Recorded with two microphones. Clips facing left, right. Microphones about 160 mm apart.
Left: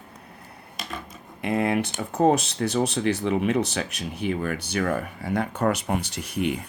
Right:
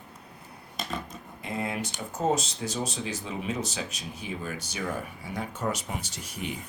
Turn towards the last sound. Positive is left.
turn(degrees=65)  # may be behind; listen again after turning